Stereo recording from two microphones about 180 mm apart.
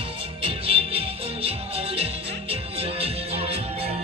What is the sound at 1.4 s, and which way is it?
Music, 35° right (ahead or behind).